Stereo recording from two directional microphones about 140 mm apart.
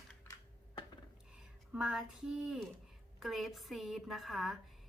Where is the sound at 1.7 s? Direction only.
5° right (ahead or behind).